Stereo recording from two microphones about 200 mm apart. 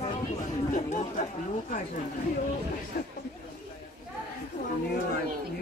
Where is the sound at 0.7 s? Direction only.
40° left (ahead or behind).